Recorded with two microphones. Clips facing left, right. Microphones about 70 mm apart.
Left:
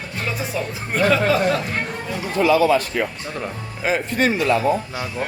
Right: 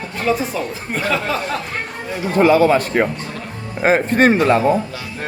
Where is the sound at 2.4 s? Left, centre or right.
Right.